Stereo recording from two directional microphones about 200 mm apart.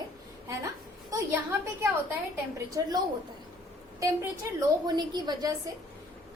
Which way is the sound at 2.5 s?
15° right (ahead or behind).